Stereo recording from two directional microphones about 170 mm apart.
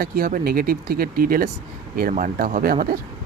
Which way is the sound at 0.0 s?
60° right (ahead or behind).